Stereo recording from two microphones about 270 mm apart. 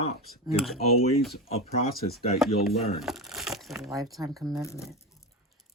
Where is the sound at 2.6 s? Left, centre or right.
Centre.